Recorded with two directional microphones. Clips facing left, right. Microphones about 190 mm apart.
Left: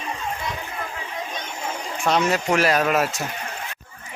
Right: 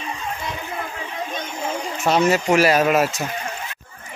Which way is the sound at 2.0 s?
5° right (ahead or behind).